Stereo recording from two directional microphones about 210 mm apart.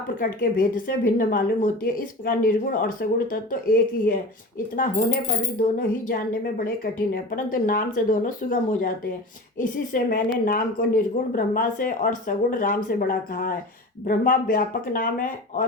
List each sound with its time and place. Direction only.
0.2 s speech: 40° left (ahead or behind)